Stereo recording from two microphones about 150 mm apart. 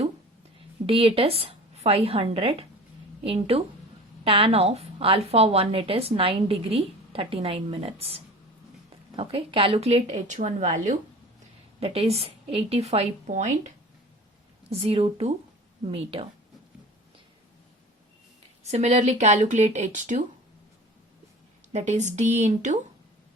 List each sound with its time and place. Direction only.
0.9 s a woman's voice: 40° right (ahead or behind)
11.8 s a woman's voice: 40° right (ahead or behind)
14.7 s a woman's voice: 40° right (ahead or behind)
18.6 s a woman's voice: 50° right (ahead or behind)
21.7 s a woman's voice: 50° right (ahead or behind)